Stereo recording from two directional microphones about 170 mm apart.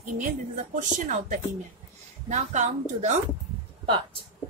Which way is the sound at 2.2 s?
45° right (ahead or behind).